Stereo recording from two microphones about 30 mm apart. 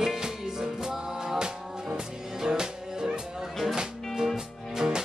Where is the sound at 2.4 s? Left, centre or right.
Right.